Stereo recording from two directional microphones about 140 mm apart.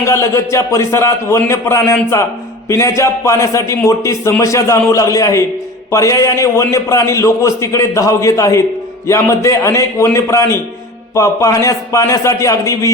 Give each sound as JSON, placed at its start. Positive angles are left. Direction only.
{"t": 0.0, "sound": "a man's voice", "side_deg": 20}